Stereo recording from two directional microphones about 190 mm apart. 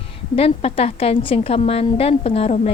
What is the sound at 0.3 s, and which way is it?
A woman's voice, 30° left (ahead or behind).